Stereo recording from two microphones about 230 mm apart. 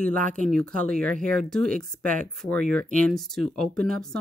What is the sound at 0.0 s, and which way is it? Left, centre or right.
Speech, right.